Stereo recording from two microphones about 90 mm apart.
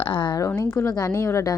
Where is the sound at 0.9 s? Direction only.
40° left (ahead or behind).